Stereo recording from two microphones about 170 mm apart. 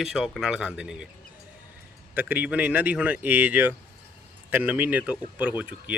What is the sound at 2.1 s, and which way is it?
Speech, 10° right (ahead or behind).